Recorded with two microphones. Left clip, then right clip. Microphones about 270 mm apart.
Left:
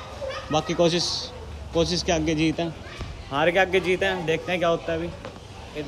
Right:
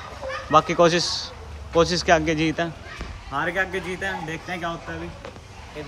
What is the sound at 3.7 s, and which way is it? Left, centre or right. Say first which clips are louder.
Speech: left 7 dB; left.